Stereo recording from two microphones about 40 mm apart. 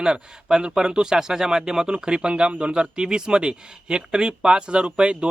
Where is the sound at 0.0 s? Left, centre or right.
Centre.